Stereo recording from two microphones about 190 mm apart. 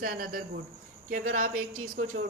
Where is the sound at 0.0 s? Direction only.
50° right (ahead or behind).